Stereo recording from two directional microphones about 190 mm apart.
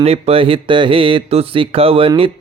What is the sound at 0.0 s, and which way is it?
Speech, 30° right (ahead or behind).